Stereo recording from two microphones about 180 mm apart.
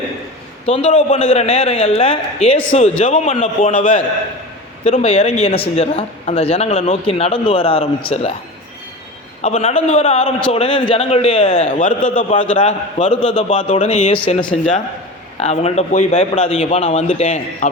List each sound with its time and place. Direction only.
0.6 s speech: 35° left (ahead or behind)
9.4 s speech: 35° left (ahead or behind)
15.4 s speech: 35° left (ahead or behind)